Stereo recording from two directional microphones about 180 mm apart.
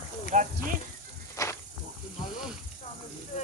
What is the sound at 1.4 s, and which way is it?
Snake, 15° left (ahead or behind).